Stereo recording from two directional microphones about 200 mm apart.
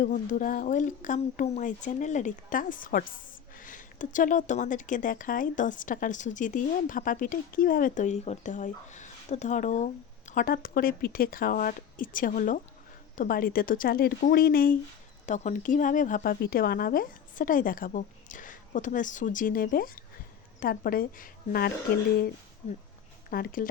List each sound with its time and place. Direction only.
0.0 s a woman's voice: 40° left (ahead or behind)
23.3 s speech: 45° left (ahead or behind)